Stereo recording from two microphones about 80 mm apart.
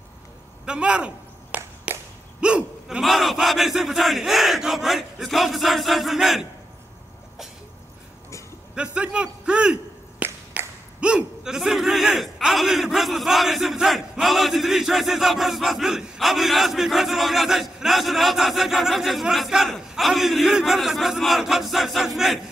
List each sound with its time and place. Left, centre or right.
0.7 s a sound: centre
2.4 s hiccup: centre
3.0 s a man's voice: centre
8.7 s a man's voice: centre
10.2 s a sound: right
11.0 s a man's voice: centre